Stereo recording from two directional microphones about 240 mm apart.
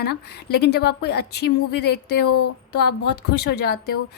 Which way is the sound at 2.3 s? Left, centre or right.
Left.